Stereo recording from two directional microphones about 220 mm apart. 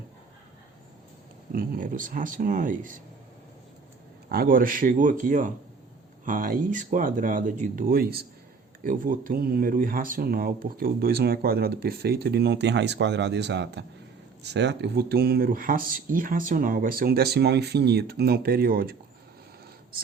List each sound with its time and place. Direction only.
1.5 s speech: 40° right (ahead or behind)
4.3 s speech: 40° right (ahead or behind)